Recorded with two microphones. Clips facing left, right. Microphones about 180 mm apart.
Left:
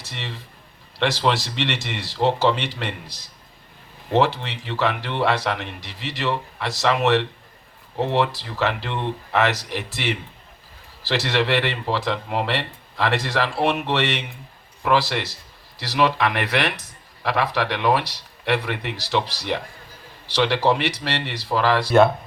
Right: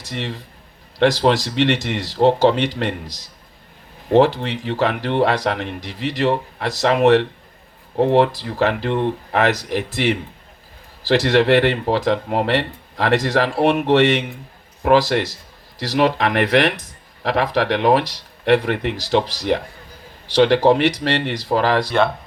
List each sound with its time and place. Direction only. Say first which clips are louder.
0.1 s speech: right 8 dB; 45° right (ahead or behind)
4.4 s a man's voice: right 5 dB; 50° right (ahead or behind)
21.8 s speech: left 3 dB; 5° left (ahead or behind)